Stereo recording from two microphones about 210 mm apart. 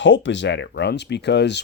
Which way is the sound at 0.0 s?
60° left (ahead or behind).